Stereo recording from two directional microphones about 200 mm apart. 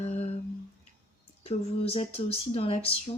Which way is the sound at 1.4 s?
30° left (ahead or behind).